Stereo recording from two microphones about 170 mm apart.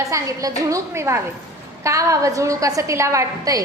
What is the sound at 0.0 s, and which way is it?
A woman's voice, 20° right (ahead or behind).